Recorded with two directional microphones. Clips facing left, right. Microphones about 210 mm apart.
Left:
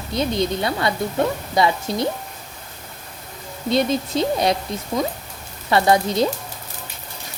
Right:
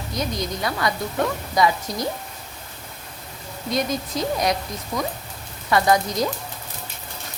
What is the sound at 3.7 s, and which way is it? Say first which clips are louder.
Speech: left 5 dB; 25° left (ahead or behind).